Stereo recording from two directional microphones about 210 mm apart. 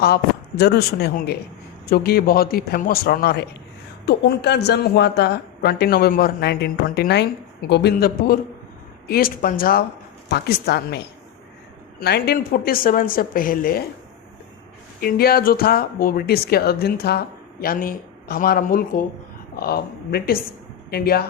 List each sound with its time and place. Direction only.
0.6 s speech: 50° left (ahead or behind)
15.0 s speech: 45° left (ahead or behind)